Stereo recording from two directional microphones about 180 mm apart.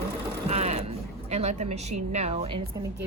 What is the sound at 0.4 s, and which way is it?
Speech, 35° right (ahead or behind).